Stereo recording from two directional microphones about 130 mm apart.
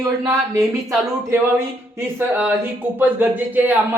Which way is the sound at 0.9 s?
20° right (ahead or behind).